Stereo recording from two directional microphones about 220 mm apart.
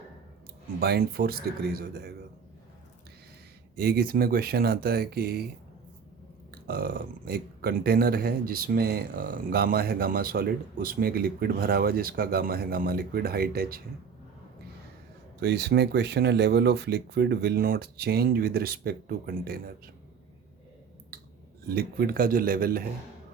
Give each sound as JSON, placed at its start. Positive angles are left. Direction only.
{"t": 0.8, "sound": "speech", "side_deg": -45}
{"t": 3.8, "sound": "speech", "side_deg": -45}
{"t": 6.5, "sound": "speech", "side_deg": -45}
{"t": 15.4, "sound": "speech", "side_deg": -50}
{"t": 21.7, "sound": "speech", "side_deg": -45}